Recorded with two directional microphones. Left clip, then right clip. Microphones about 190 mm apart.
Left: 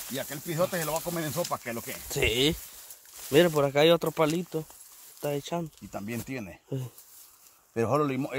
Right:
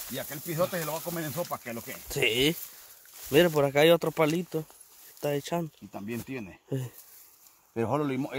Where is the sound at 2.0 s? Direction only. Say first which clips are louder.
Even; 5° right (ahead or behind); by 5.7 s 25° right (ahead or behind).